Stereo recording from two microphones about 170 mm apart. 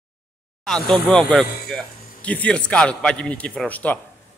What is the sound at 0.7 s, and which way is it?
A man's voice, 5° left (ahead or behind).